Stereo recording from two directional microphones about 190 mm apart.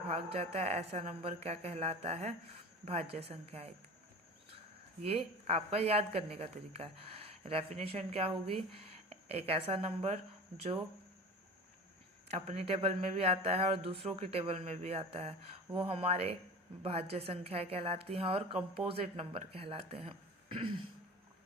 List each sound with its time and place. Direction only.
0.1 s speech: 30° right (ahead or behind)
5.0 s speech: 30° right (ahead or behind)
12.3 s speech: 35° right (ahead or behind)